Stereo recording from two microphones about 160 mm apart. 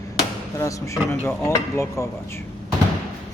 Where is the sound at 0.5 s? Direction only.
20° left (ahead or behind).